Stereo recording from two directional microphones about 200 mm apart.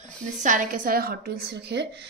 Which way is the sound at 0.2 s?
40° right (ahead or behind).